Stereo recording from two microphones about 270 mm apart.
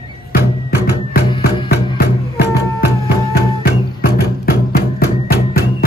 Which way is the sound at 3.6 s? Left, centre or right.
Left.